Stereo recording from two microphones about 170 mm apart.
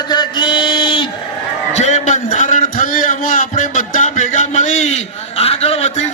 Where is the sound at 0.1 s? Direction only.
25° left (ahead or behind).